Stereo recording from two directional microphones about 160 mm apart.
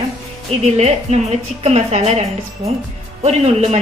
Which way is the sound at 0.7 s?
40° right (ahead or behind).